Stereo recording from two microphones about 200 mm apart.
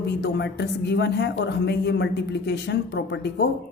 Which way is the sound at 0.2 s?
60° left (ahead or behind).